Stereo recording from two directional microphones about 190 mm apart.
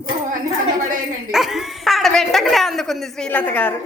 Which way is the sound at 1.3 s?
Centre (ahead or behind).